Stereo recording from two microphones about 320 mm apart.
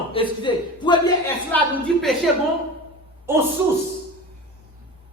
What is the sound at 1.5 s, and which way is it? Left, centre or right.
A woman's voice, centre.